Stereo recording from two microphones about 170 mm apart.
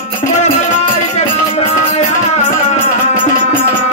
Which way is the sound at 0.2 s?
45° left (ahead or behind).